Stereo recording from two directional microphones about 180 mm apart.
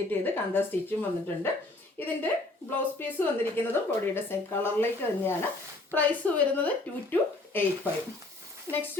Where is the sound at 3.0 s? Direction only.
10° left (ahead or behind).